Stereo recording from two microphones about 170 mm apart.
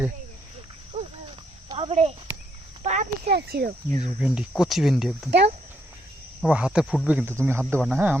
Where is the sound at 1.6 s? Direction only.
30° right (ahead or behind).